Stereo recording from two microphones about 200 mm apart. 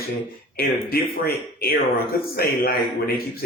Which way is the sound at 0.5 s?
45° left (ahead or behind).